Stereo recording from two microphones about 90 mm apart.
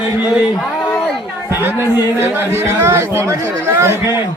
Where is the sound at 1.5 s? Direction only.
25° right (ahead or behind).